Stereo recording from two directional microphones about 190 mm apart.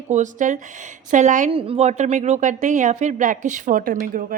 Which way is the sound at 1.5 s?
30° right (ahead or behind).